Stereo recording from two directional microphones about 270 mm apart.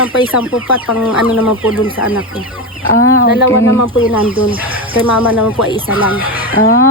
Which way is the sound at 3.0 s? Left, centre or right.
Left.